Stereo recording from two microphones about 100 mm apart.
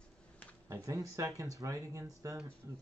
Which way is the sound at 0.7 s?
30° right (ahead or behind).